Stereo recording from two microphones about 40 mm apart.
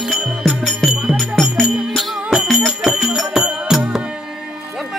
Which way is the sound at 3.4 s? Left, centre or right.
Right.